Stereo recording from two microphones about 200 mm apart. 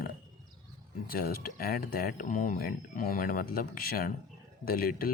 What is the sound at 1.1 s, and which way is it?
Speech, 45° left (ahead or behind).